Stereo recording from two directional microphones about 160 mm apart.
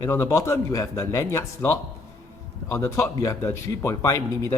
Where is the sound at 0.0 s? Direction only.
20° left (ahead or behind).